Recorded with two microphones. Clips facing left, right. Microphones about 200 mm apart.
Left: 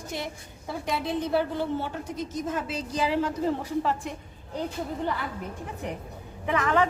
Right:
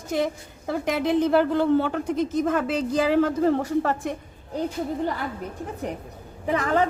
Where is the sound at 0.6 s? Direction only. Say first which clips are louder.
Right 6 dB; 80° right.